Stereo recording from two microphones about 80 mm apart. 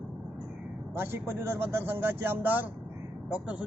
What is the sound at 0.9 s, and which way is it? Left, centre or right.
A man's voice, right.